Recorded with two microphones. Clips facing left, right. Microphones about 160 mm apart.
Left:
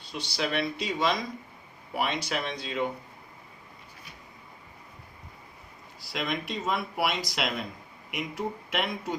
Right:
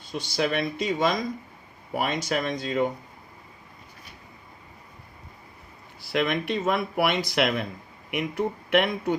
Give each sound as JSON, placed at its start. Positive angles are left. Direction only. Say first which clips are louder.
{"t": 0.0, "sound": "speech", "louder": "right 5 dB", "side_deg": -50}
{"t": 6.1, "sound": "speech", "louder": "right 7 dB", "side_deg": -60}